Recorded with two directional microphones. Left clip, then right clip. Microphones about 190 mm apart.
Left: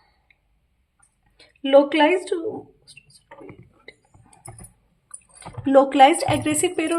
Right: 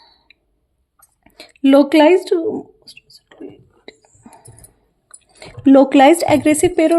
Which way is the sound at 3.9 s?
50° right (ahead or behind).